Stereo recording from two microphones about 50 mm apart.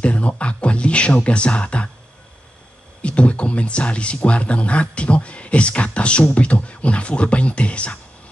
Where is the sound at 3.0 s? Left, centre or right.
Left.